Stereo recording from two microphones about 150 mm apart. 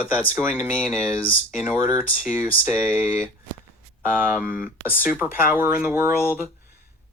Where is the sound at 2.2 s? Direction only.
10° right (ahead or behind).